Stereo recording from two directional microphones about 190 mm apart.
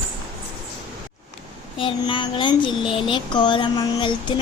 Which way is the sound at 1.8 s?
25° left (ahead or behind).